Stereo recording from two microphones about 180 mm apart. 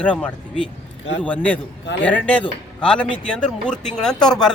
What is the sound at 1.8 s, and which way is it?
Speech, 80° left.